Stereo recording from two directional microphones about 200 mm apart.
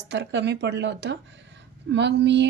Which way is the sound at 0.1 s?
60° right (ahead or behind).